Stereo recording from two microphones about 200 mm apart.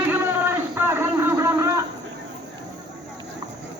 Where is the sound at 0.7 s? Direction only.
10° right (ahead or behind).